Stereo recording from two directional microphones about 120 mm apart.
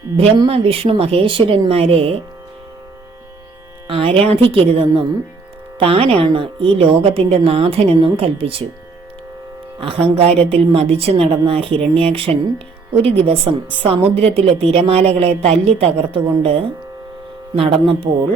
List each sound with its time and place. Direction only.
0.4 s a woman's voice: 50° right (ahead or behind)
3.8 s a woman's voice: 50° right (ahead or behind)
9.8 s a woman's voice: 55° right (ahead or behind)